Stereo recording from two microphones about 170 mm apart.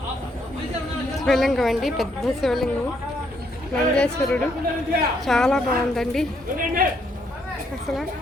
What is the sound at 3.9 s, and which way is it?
Speech, 5° left (ahead or behind).